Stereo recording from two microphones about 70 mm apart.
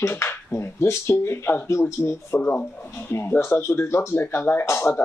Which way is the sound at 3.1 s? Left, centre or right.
Left.